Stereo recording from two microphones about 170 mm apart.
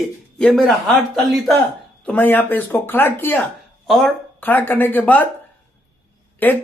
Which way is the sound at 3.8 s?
Centre (ahead or behind).